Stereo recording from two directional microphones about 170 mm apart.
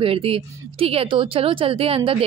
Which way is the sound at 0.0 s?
35° right (ahead or behind).